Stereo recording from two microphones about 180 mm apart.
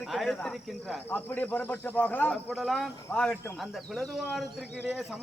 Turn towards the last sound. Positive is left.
turn(degrees=0)  # may be behind; listen again after turning